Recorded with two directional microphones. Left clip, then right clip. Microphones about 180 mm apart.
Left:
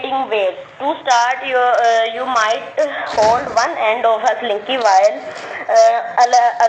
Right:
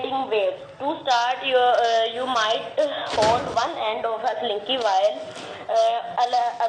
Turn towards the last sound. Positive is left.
turn(degrees=45)  # may be behind; listen again after turning